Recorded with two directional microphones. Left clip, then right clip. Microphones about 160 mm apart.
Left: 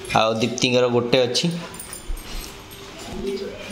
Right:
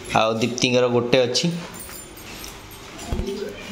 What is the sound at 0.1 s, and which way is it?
A man's voice, 5° left (ahead or behind).